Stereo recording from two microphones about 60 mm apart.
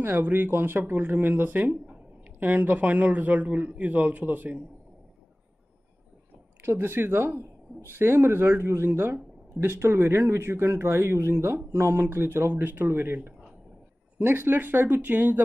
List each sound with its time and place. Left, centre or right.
0.2 s speech: right
6.6 s speech: right